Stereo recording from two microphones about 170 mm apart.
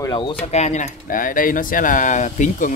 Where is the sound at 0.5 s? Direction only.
45° left (ahead or behind).